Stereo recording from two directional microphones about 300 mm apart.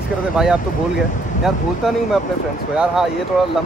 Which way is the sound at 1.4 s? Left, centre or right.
Centre.